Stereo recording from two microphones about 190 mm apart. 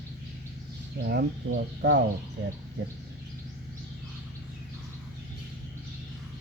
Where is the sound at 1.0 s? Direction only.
55° right (ahead or behind).